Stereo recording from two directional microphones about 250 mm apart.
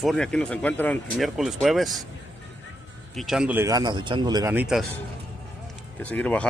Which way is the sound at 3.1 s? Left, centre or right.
Centre.